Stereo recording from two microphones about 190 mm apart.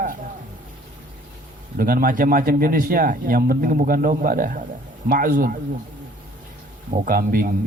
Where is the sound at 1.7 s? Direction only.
50° right (ahead or behind).